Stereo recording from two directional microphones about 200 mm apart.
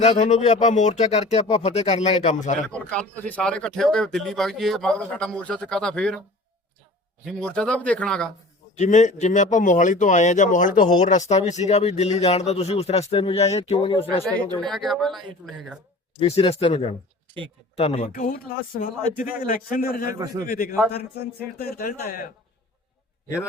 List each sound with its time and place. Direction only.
0.0 s speech: 35° left (ahead or behind)
2.6 s speech: 5° left (ahead or behind)
7.3 s speech: 5° left (ahead or behind)
8.7 s speech: 35° left (ahead or behind)
14.4 s speech: 5° left (ahead or behind)
16.1 s speech: 30° left (ahead or behind)
18.1 s speech: 45° left (ahead or behind)
20.1 s a man's voice: 20° right (ahead or behind)
20.5 s speech: 45° left (ahead or behind)